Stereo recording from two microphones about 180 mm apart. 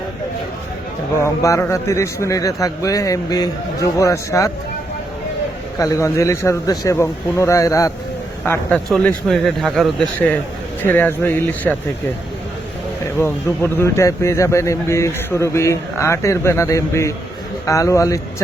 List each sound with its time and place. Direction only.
1.2 s speech: 15° left (ahead or behind)
5.8 s speech: 15° left (ahead or behind)
8.4 s speech: 5° left (ahead or behind)
13.1 s speech: 15° left (ahead or behind)